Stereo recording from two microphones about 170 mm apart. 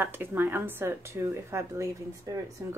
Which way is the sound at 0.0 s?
15° right (ahead or behind).